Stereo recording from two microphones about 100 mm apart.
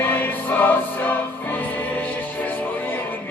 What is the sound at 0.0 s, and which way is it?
Music, 20° left (ahead or behind).